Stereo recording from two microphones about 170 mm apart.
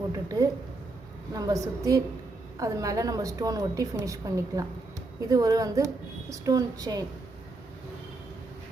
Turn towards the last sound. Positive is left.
turn(degrees=-20)  # may be behind; listen again after turning